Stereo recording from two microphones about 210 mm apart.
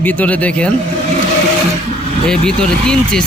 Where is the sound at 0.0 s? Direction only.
5° left (ahead or behind).